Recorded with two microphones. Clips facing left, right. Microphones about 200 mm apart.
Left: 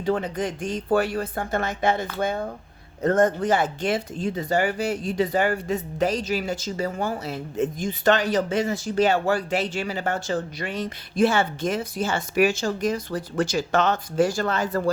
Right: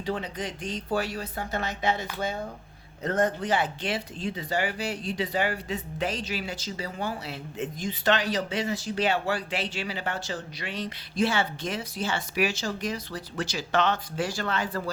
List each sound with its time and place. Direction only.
0.0 s speech: 50° left (ahead or behind)